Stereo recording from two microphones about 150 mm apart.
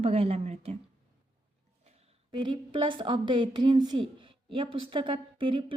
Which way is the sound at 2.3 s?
30° right (ahead or behind).